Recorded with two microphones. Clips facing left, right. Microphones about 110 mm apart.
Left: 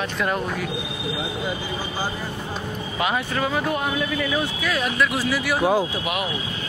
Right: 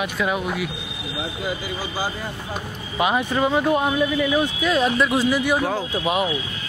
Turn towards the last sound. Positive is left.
turn(degrees=-25)  # may be behind; listen again after turning